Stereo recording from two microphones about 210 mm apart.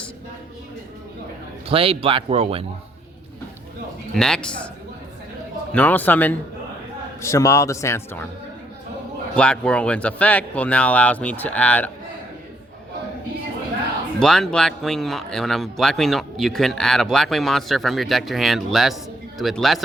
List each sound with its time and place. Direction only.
1.6 s a man's voice: 25° right (ahead or behind)
4.1 s speech: 5° left (ahead or behind)
5.7 s speech: 10° left (ahead or behind)
9.3 s speech: 5° left (ahead or behind)
14.2 s speech: 5° left (ahead or behind)